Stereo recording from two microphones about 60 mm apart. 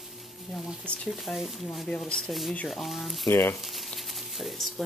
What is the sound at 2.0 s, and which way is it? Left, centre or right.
Speech, centre.